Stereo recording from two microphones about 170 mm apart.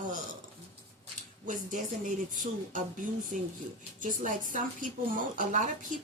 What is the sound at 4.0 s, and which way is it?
Speech, 50° right (ahead or behind).